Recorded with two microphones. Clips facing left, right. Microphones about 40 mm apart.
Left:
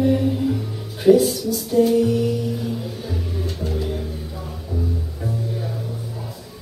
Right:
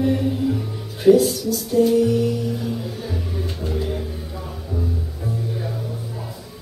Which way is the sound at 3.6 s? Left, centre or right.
Centre.